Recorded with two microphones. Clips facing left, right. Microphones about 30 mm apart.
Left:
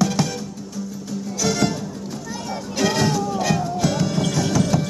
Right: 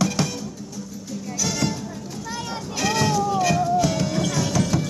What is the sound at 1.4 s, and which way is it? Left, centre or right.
Music, centre.